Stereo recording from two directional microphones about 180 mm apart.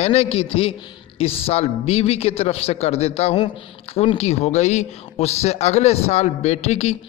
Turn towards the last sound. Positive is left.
turn(degrees=40)  # may be behind; listen again after turning